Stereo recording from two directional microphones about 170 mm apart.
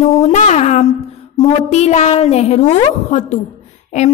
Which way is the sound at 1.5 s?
40° left (ahead or behind).